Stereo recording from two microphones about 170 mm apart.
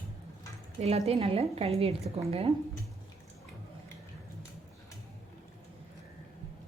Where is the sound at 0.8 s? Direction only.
40° right (ahead or behind).